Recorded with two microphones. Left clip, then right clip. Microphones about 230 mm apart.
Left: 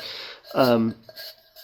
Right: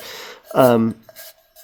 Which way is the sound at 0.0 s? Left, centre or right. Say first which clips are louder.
Right 1 dB; right.